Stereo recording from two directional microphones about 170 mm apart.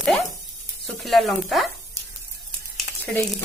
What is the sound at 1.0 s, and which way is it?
Speech, centre (ahead or behind).